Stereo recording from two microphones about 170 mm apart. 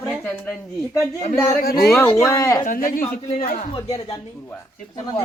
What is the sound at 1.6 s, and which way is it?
Speech, 65° left (ahead or behind).